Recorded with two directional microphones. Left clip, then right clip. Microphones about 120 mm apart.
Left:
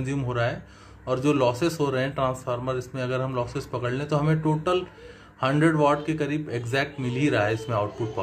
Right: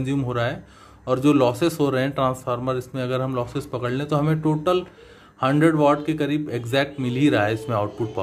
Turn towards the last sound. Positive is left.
turn(degrees=-45)  # may be behind; listen again after turning